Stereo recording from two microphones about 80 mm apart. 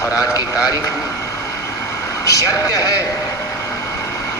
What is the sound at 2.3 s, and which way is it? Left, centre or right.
Speech, left.